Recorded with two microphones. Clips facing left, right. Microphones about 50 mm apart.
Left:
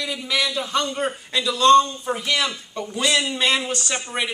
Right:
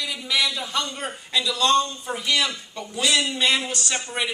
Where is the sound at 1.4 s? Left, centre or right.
Left.